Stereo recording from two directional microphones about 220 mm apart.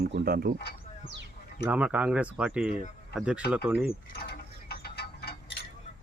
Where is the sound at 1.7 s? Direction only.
5° right (ahead or behind).